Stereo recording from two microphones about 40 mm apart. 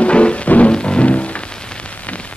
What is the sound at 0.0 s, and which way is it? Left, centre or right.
Music, left.